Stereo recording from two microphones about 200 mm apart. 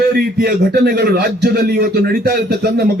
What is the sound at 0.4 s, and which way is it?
Speech, 50° right (ahead or behind).